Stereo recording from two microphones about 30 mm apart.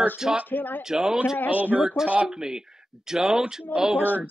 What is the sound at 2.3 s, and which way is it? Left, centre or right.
Speech, right.